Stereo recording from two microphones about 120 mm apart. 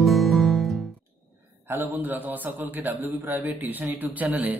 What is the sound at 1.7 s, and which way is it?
A man's voice, 15° right (ahead or behind).